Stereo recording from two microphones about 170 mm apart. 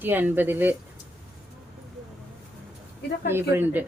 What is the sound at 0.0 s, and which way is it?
Speech, 10° right (ahead or behind).